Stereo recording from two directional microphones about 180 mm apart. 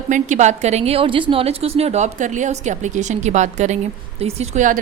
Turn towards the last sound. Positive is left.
turn(degrees=-45)  # may be behind; listen again after turning